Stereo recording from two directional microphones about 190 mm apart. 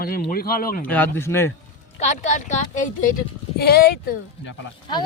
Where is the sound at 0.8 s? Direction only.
10° left (ahead or behind).